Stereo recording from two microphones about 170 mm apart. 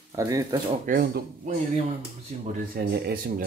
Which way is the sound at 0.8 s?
65° right (ahead or behind).